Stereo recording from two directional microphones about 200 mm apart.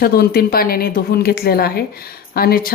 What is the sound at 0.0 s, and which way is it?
Speech, 50° left (ahead or behind).